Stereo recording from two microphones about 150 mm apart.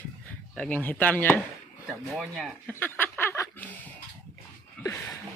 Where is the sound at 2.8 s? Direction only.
15° left (ahead or behind).